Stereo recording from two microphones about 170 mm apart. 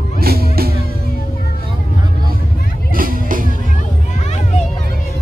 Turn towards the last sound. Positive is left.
turn(degrees=-55)  # may be behind; listen again after turning